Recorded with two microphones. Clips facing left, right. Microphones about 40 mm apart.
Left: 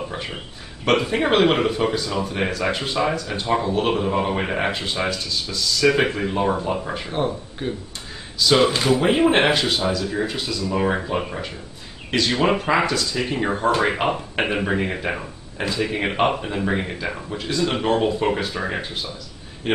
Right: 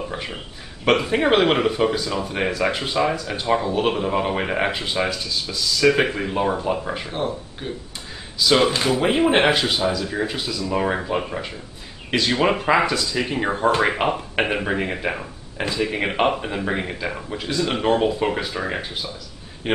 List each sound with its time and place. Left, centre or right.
0.1 s speech: centre
8.9 s speech: centre
15.5 s speech: centre
15.9 s a man's voice: centre